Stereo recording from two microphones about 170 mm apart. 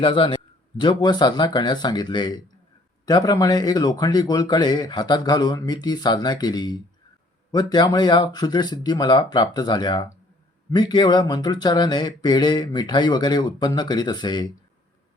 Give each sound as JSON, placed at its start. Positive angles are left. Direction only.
{"t": 0.0, "sound": "speech", "side_deg": 30}